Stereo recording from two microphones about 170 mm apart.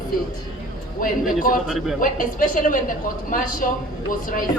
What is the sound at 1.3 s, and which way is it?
A woman's voice, 55° left (ahead or behind).